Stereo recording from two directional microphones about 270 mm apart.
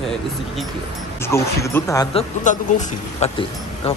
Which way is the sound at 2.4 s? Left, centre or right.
Left.